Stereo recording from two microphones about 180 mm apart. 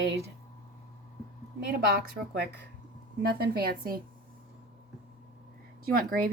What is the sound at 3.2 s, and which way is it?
Speech, 55° right (ahead or behind).